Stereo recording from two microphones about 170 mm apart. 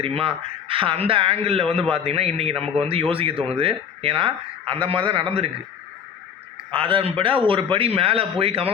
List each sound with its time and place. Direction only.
0.0 s a man's voice: 35° right (ahead or behind)
6.7 s a man's voice: 30° right (ahead or behind)